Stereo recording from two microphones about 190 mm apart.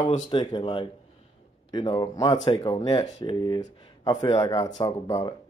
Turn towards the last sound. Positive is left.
turn(degrees=20)  # may be behind; listen again after turning